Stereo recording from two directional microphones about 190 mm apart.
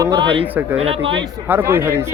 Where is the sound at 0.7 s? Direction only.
30° right (ahead or behind).